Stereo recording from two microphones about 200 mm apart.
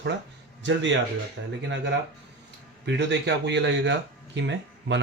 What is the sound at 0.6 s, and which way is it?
Speech, 65° right (ahead or behind).